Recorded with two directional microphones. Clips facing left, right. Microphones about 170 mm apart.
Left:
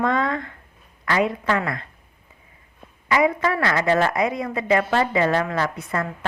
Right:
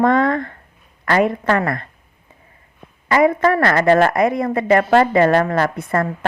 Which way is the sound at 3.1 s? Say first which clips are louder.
Right 5 dB; 50° right (ahead or behind).